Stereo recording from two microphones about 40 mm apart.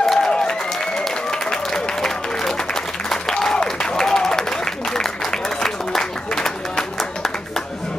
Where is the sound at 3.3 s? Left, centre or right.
Centre.